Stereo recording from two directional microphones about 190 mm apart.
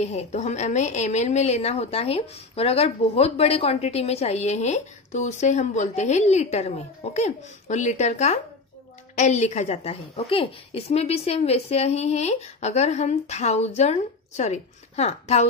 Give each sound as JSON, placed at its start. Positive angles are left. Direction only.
{"t": 0.0, "sound": "a woman's voice", "side_deg": 35}